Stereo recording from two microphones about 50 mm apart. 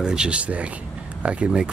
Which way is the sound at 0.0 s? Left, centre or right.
Centre.